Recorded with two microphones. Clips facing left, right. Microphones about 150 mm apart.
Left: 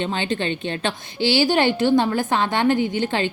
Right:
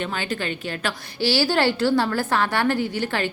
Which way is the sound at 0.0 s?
25° left (ahead or behind).